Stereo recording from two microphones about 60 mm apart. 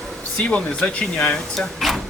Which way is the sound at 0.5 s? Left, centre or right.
Centre.